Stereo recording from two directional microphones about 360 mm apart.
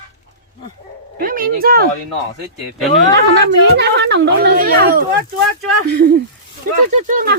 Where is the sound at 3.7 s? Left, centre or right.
Right.